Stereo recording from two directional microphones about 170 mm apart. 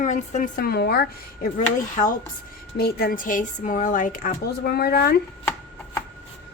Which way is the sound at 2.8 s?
65° left (ahead or behind).